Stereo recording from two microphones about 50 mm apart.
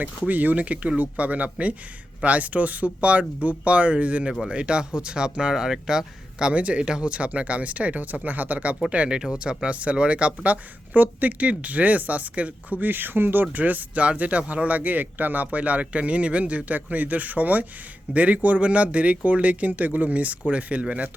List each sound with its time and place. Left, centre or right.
0.0 s speech: right; by 6.5 s centre
6.5 s speech: right
8.9 s speech: right
12.8 s speech: right